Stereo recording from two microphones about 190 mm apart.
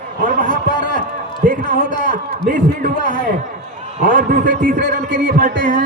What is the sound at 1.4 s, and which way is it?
Speech, 45° right (ahead or behind).